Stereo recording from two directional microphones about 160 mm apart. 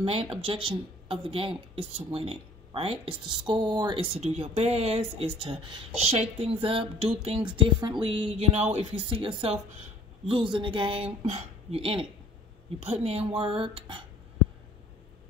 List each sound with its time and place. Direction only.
0.0 s speech: 35° right (ahead or behind)